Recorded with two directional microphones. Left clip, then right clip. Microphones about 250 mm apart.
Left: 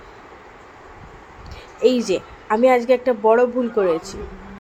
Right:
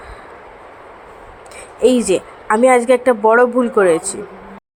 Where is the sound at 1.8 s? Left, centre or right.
Centre.